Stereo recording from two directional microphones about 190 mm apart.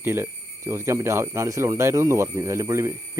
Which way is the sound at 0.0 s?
15° right (ahead or behind).